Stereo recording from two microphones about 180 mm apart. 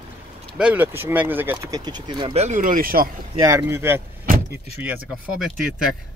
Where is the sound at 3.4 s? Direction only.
15° right (ahead or behind).